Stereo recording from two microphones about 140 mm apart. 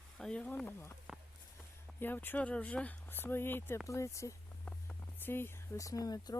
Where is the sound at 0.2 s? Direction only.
5° left (ahead or behind).